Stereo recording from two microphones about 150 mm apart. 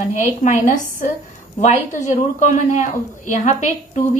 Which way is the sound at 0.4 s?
55° left (ahead or behind).